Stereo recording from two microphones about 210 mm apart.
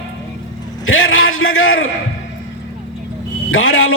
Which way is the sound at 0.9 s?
75° left (ahead or behind).